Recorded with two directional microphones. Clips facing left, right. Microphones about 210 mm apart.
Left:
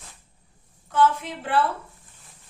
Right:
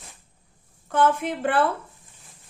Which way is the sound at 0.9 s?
55° right (ahead or behind).